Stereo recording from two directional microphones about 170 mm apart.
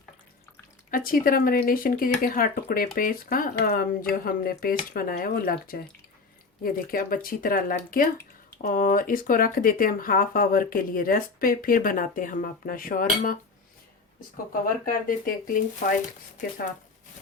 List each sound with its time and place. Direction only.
0.9 s speech: 55° left (ahead or behind)
14.8 s speech: 55° left (ahead or behind)